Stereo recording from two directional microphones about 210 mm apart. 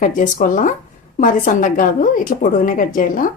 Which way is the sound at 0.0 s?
35° left (ahead or behind).